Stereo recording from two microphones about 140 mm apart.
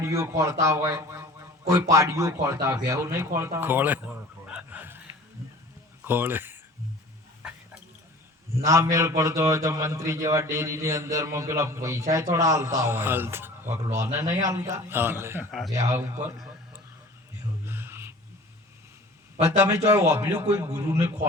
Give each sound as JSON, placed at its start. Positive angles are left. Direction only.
{"t": 0.0, "sound": "a man's voice", "side_deg": -20}
{"t": 4.5, "sound": "a sound", "side_deg": -10}
{"t": 6.1, "sound": "speech", "side_deg": -15}
{"t": 8.6, "sound": "a man's voice", "side_deg": -20}
{"t": 17.7, "sound": "whispering", "side_deg": -15}
{"t": 19.4, "sound": "a man's voice", "side_deg": -25}